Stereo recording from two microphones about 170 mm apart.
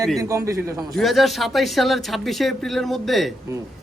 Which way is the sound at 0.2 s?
15° right (ahead or behind).